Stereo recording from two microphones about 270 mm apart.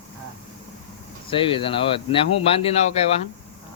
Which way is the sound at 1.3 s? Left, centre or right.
Centre.